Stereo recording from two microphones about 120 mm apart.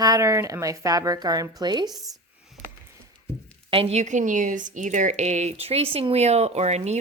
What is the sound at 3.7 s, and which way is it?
A woman's voice, 55° right (ahead or behind).